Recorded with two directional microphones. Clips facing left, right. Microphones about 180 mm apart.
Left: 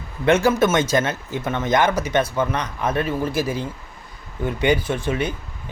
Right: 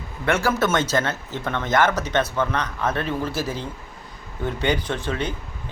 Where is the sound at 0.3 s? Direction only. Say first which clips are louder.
Left 4 dB; 20° left (ahead or behind).